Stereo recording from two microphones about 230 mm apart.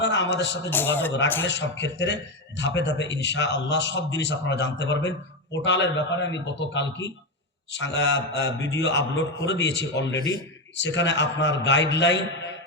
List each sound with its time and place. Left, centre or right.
0.0 s a man's voice: left
0.7 s a man's voice: centre
1.5 s a man's voice: left